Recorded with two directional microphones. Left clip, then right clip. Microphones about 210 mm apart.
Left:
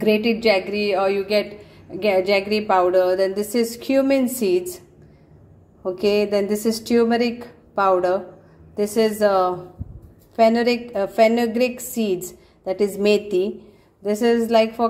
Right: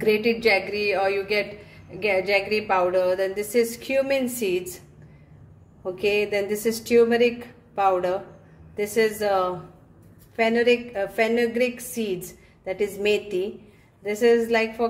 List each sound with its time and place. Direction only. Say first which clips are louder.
0.4 s a woman's voice: left 2 dB; 25° left (ahead or behind)
5.9 s a woman's voice: left 4 dB; 25° left (ahead or behind)